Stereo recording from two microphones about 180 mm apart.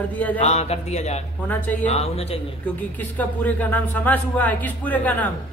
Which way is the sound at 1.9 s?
35° left (ahead or behind).